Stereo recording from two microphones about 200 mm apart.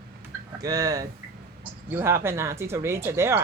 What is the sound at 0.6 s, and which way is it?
Speech, 20° right (ahead or behind).